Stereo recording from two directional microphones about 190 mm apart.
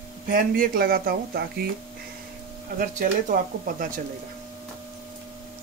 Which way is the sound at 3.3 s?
45° right (ahead or behind).